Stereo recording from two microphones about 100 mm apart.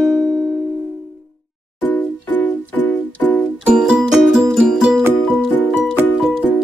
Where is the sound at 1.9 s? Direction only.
15° left (ahead or behind).